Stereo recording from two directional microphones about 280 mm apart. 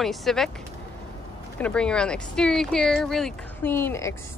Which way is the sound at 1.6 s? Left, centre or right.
Centre.